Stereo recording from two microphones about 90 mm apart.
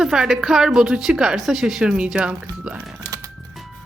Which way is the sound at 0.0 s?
5° right (ahead or behind).